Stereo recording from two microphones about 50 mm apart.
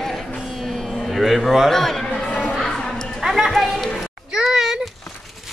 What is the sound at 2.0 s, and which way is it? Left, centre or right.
Chatter, centre.